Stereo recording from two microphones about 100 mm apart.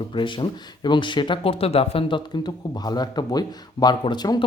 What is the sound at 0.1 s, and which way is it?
Speech, 55° left (ahead or behind).